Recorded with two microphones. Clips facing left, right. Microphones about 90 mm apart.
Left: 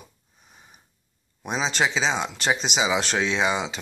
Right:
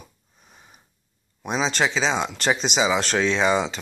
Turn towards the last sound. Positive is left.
turn(degrees=10)  # may be behind; listen again after turning